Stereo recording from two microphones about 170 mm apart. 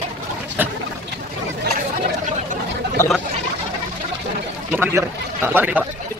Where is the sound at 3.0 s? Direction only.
15° left (ahead or behind).